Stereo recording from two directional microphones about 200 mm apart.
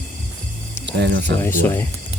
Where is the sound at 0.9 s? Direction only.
60° right (ahead or behind).